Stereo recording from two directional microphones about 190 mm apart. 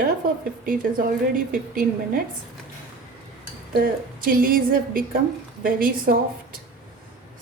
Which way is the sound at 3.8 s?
50° right (ahead or behind).